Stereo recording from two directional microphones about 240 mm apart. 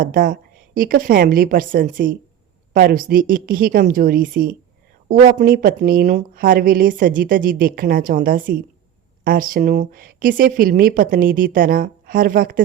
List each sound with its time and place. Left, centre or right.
0.0 s speech: right